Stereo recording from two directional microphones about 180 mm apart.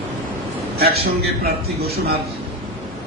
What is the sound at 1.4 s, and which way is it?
Speech, 60° right (ahead or behind).